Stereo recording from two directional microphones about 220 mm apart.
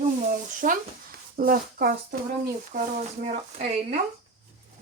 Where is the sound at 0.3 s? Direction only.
35° right (ahead or behind).